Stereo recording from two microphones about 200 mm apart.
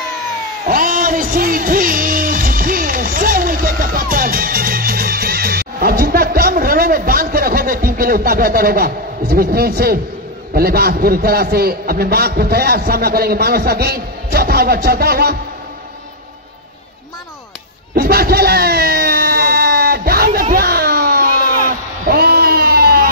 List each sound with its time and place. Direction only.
0.7 s music: 45° right (ahead or behind)
10.5 s a man's voice: 50° right (ahead or behind)
17.9 s a sound: 50° right (ahead or behind)